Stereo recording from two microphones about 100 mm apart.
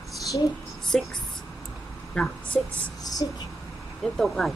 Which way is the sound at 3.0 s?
40° left (ahead or behind).